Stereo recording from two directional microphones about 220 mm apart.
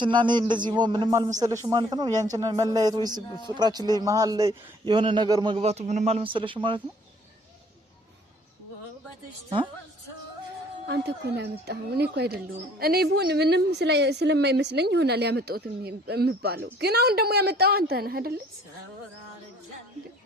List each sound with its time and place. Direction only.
0.0 s a man's voice: 20° right (ahead or behind)
10.8 s a woman's voice: 50° right (ahead or behind)